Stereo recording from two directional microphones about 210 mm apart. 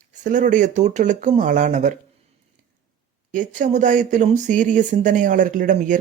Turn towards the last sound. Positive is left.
turn(degrees=-40)  # may be behind; listen again after turning